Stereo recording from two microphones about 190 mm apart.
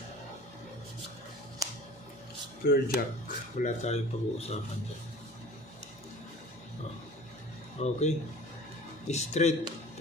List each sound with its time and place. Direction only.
1.6 s music: 15° right (ahead or behind)
2.6 s speech: 50° left (ahead or behind); by 4.5 s 35° left (ahead or behind)
7.8 s speech: 35° left (ahead or behind)